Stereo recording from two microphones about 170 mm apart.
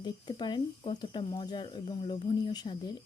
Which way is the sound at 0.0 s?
25° left (ahead or behind).